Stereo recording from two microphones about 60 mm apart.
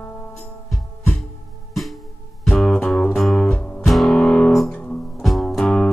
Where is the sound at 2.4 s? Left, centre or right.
Centre.